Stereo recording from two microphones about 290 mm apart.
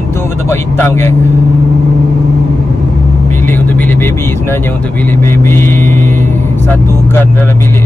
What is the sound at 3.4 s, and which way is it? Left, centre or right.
Speech, centre.